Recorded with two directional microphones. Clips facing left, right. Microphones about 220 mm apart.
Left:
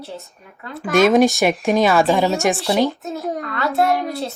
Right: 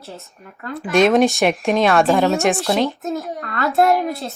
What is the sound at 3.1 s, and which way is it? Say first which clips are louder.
Speech: left 1 dB; 40° right (ahead or behind).